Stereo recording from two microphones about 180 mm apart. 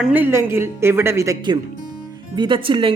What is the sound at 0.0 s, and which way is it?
A woman's voice, 10° right (ahead or behind).